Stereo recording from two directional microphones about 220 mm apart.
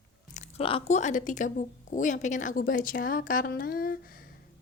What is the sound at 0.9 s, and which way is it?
A woman's voice, 35° left (ahead or behind).